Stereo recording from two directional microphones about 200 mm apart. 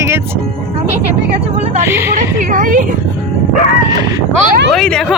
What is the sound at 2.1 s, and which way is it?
Speech, 40° right (ahead or behind).